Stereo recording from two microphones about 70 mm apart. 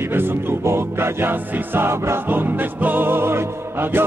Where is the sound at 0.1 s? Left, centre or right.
Right.